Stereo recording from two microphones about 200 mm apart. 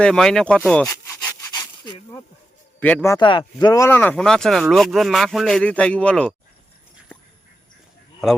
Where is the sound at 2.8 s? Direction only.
10° left (ahead or behind).